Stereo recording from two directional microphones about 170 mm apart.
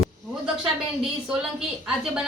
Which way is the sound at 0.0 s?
5° right (ahead or behind).